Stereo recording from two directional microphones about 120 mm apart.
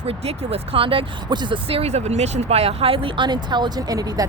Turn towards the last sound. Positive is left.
turn(degrees=-30)  # may be behind; listen again after turning